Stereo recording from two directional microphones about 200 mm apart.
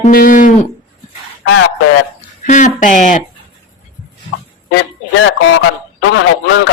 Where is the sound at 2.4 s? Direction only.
40° left (ahead or behind).